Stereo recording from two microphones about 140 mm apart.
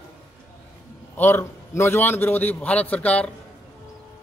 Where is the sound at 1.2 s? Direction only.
15° left (ahead or behind).